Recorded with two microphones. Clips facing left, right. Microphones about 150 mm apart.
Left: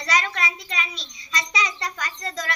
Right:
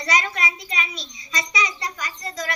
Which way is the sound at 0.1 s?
15° right (ahead or behind).